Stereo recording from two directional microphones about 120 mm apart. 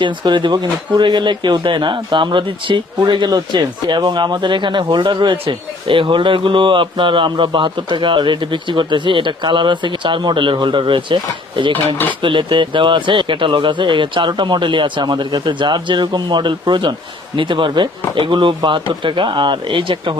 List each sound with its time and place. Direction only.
0.0 s speech: 40° right (ahead or behind)